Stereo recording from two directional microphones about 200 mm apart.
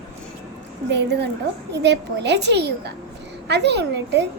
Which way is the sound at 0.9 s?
55° right (ahead or behind).